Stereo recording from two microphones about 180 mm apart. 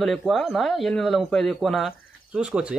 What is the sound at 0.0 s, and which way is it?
Speech, centre (ahead or behind).